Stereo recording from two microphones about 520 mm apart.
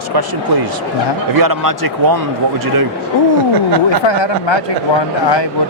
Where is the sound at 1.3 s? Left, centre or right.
Right.